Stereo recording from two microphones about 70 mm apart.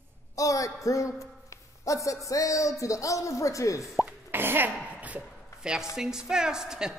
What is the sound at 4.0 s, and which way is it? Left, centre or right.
Speech, right.